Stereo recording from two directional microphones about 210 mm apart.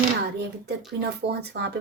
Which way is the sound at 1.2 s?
55° right (ahead or behind).